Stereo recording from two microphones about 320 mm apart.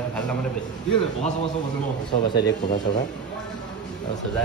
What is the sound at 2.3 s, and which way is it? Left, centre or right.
Speech, left.